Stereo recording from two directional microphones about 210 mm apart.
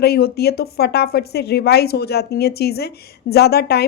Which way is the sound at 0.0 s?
50° left (ahead or behind).